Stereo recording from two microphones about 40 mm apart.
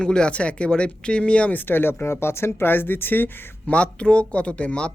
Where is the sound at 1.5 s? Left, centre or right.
Left.